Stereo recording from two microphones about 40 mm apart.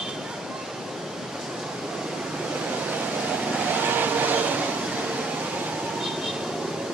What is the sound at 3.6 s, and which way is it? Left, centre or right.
Vehicle, right.